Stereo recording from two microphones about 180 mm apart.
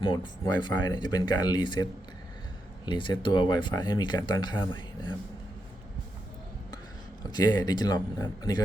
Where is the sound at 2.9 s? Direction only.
25° left (ahead or behind).